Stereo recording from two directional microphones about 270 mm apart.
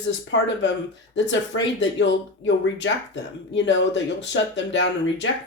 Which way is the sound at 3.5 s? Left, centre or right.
Left.